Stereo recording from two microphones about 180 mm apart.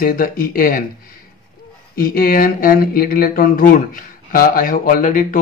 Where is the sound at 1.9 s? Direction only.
55° left (ahead or behind).